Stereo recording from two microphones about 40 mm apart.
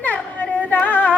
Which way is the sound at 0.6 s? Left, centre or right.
Left.